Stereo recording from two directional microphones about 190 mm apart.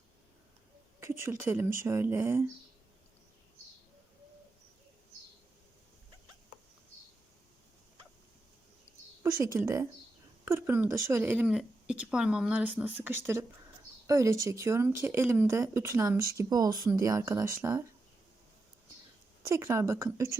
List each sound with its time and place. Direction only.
0.9 s speech: 15° right (ahead or behind)
9.4 s speech: 15° right (ahead or behind)
19.5 s speech: 15° right (ahead or behind)